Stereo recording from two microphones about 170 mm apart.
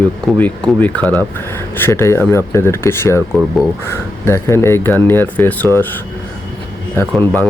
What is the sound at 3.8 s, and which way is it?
Speech, 15° left (ahead or behind).